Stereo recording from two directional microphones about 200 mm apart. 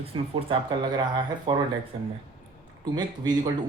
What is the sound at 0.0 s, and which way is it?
Speech, 30° right (ahead or behind).